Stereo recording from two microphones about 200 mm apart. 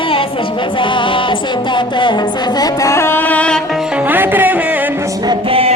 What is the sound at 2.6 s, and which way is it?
Music, 15° left (ahead or behind).